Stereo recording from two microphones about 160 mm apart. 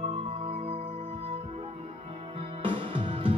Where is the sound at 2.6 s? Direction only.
35° right (ahead or behind).